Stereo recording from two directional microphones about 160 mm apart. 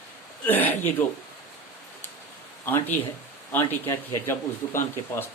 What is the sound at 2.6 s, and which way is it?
Speech, 10° left (ahead or behind).